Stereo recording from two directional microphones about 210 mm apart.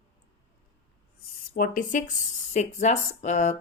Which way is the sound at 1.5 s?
40° left (ahead or behind).